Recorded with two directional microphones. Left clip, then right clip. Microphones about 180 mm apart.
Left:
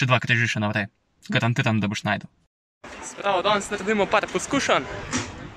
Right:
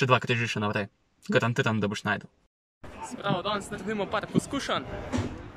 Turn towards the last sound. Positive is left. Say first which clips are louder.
# left 4 dB
turn(degrees=-20)  # may be behind; listen again after turning